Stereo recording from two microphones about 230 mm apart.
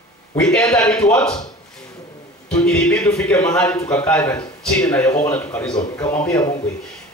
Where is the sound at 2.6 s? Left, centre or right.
Centre.